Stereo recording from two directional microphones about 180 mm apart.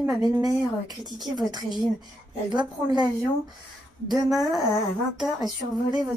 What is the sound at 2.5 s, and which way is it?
A woman's voice, 25° right (ahead or behind).